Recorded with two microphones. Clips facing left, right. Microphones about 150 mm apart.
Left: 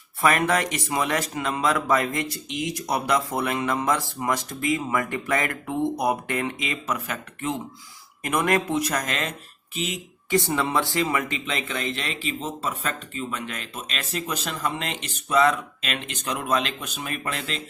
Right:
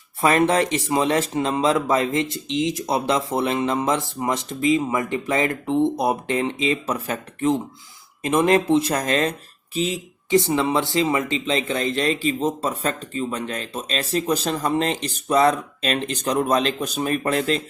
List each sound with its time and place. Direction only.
0.2 s speech: 25° right (ahead or behind)